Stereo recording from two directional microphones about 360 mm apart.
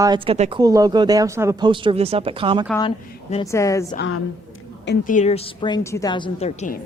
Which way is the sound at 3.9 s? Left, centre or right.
Left.